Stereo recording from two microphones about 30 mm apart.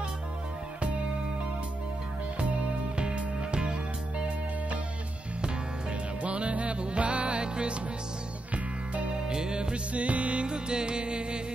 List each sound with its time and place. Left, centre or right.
6.2 s music: right
9.3 s music: right
9.9 s music: right
10.4 s music: right